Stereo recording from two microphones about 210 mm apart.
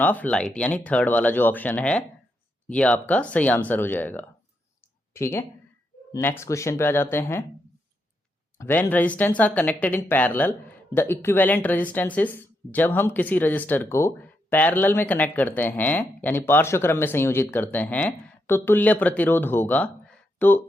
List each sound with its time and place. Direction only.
0.0 s speech: 5° left (ahead or behind)
8.5 s speech: 10° left (ahead or behind)